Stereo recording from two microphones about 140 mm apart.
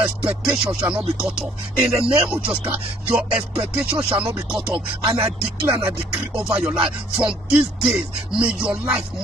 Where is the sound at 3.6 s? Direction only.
40° right (ahead or behind).